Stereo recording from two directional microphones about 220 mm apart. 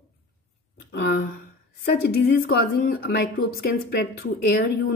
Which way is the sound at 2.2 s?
45° left (ahead or behind).